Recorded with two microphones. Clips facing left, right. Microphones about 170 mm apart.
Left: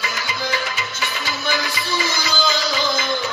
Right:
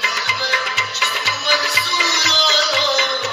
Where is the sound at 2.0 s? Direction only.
75° right (ahead or behind).